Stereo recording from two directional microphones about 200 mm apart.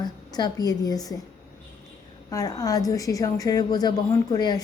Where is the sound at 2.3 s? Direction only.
15° left (ahead or behind).